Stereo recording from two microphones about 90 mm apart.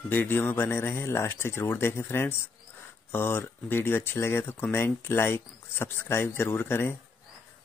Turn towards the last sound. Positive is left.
turn(degrees=25)  # may be behind; listen again after turning